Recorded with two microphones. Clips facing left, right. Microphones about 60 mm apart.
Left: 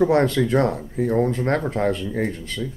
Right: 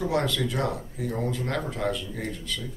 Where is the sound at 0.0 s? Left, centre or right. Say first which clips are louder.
Left 8 dB; left.